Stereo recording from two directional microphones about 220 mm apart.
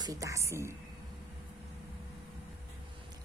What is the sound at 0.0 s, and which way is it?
Speech, 15° right (ahead or behind).